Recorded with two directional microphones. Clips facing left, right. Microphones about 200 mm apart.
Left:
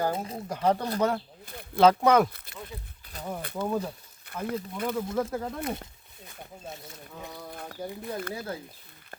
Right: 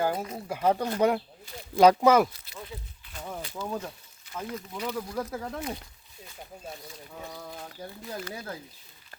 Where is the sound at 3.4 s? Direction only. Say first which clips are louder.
Left 5 dB; 60° left (ahead or behind).